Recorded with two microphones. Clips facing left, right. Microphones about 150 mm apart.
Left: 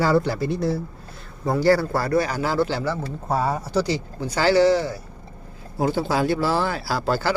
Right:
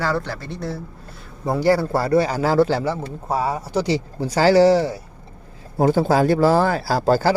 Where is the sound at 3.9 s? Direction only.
35° right (ahead or behind).